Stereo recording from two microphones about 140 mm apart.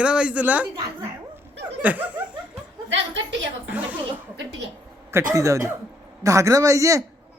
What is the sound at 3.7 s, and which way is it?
Speech, 10° right (ahead or behind).